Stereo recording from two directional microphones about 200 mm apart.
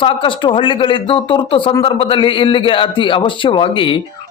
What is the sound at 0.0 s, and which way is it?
Speech, 25° left (ahead or behind).